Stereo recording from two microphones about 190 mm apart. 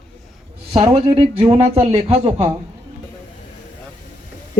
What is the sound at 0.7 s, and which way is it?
A man's voice, 20° right (ahead or behind).